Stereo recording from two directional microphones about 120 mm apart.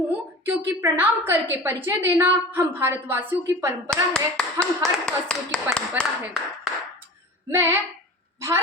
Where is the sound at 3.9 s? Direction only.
5° left (ahead or behind).